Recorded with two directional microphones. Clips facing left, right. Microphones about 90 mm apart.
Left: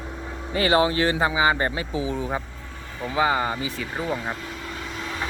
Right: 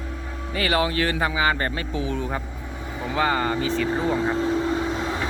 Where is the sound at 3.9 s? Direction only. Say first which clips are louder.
Right 5 dB; 25° right (ahead or behind).